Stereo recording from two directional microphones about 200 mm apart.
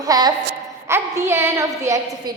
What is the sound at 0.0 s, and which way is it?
A woman's voice, 20° right (ahead or behind).